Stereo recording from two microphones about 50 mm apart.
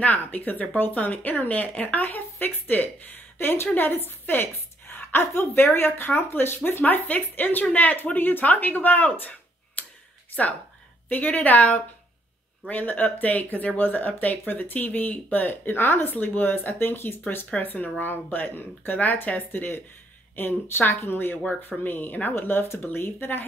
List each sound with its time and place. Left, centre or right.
0.0 s a woman's voice: left
6.8 s speech: left
9.8 s a sound: left
11.1 s speech: left
17.5 s speech: left